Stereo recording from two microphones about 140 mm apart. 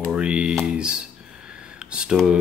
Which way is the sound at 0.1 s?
5° right (ahead or behind).